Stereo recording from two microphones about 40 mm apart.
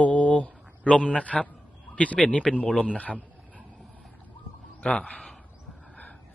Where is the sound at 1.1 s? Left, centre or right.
Left.